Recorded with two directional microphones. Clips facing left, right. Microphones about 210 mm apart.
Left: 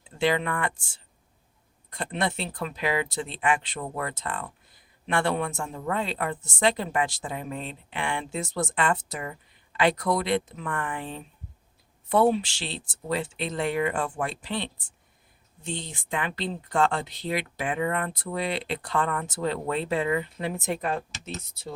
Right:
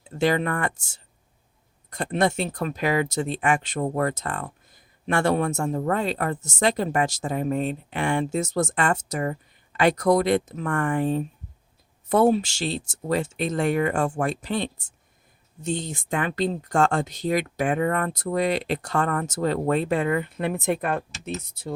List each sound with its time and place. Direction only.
0.0 s speech: 45° right (ahead or behind)